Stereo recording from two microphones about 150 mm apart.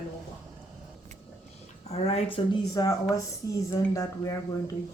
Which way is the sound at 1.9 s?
40° left (ahead or behind).